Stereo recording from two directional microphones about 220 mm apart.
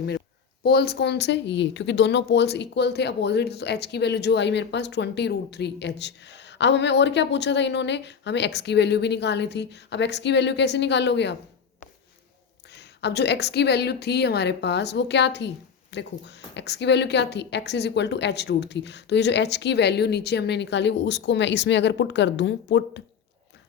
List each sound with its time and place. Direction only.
0.6 s a woman's voice: 45° left (ahead or behind)
12.7 s a woman's voice: 50° left (ahead or behind)